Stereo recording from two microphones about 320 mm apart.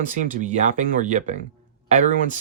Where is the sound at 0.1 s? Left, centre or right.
Right.